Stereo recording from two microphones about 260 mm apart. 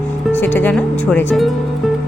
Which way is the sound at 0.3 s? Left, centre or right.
Centre.